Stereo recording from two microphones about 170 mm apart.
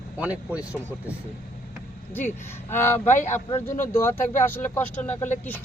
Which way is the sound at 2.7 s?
15° left (ahead or behind).